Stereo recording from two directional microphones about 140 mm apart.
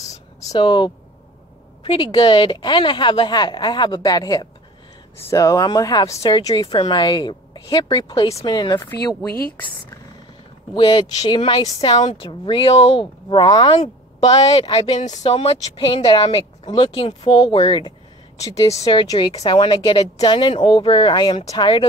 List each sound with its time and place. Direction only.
0.1 s a sound: 25° left (ahead or behind)
1.8 s speech: 35° left (ahead or behind)
10.7 s speech: 35° left (ahead or behind)
12.0 s a woman's voice: 50° left (ahead or behind)
12.3 s speech: 35° left (ahead or behind)
15.0 s speech: 55° left (ahead or behind); by 21.8 s 35° left (ahead or behind)